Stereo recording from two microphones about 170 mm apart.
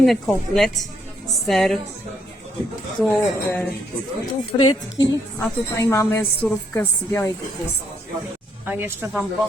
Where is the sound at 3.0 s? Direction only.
10° left (ahead or behind).